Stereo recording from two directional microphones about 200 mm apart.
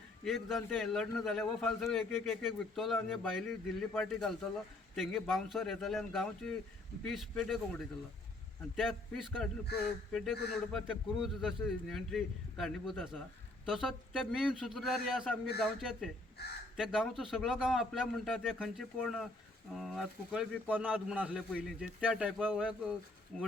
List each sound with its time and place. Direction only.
0.3 s a man's voice: centre (ahead or behind)
16.4 s speech: 55° left (ahead or behind)
16.7 s a man's voice: 5° right (ahead or behind)